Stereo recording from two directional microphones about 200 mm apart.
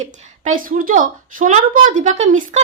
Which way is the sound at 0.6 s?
40° right (ahead or behind).